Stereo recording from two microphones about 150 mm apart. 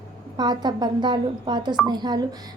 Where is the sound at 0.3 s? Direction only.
30° right (ahead or behind).